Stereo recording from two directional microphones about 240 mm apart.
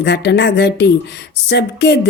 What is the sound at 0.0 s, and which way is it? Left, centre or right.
Speech, left.